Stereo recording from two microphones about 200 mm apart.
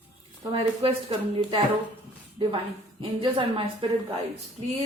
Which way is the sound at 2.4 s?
25° right (ahead or behind).